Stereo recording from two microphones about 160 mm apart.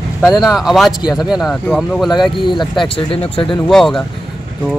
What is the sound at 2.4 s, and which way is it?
Speech, 30° left (ahead or behind).